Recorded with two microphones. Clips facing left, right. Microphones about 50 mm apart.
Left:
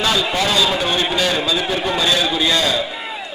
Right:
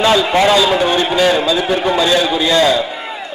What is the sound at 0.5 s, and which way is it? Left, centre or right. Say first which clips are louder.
A man's voice: right 5 dB; centre.